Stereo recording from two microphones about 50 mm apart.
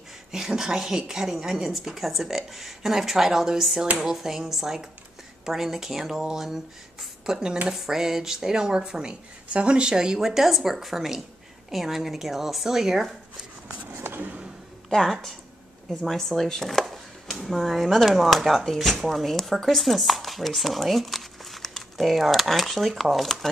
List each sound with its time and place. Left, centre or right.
0.3 s speech: centre
11.7 s chopping: centre
14.0 s vehicle: right
14.9 s chopping: centre